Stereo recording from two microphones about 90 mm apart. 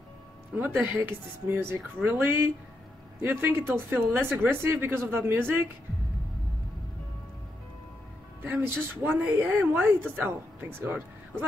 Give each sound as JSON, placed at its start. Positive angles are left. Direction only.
{"t": 0.6, "sound": "speech", "side_deg": -20}
{"t": 8.5, "sound": "speech", "side_deg": -25}